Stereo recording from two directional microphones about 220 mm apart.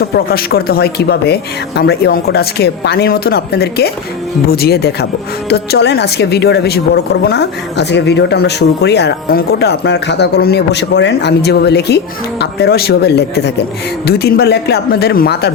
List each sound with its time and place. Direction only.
0.3 s a woman's voice: 45° left (ahead or behind)